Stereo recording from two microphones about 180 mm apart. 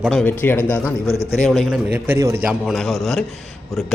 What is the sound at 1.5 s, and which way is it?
A man's voice, 5° right (ahead or behind).